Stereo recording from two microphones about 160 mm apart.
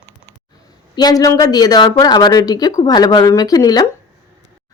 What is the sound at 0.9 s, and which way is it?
Speech, 25° left (ahead or behind).